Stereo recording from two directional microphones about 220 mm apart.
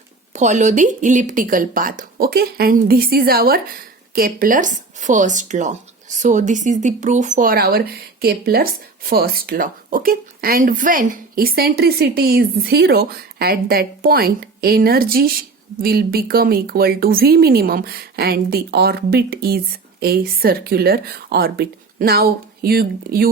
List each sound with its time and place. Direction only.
0.3 s speech: 35° right (ahead or behind)